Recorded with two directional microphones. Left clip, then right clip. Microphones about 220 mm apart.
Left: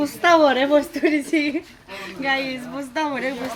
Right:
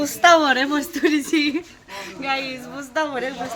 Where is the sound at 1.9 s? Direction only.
10° right (ahead or behind).